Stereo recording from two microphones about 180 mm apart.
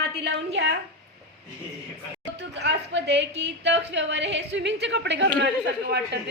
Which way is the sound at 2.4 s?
75° right (ahead or behind).